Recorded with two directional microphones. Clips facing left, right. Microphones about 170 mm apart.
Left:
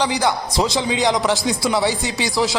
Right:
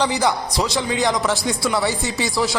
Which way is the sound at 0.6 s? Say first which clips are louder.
Left 2 dB; 20° left (ahead or behind).